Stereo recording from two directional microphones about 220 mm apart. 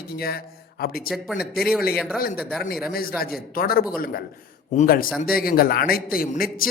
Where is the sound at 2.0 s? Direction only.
Centre (ahead or behind).